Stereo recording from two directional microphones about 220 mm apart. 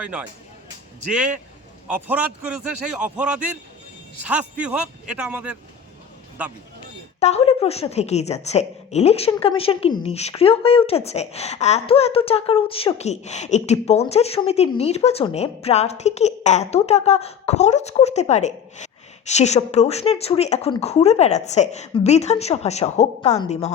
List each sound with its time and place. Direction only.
0.0 s a man's voice: 5° right (ahead or behind)
7.2 s a woman's voice: 30° left (ahead or behind)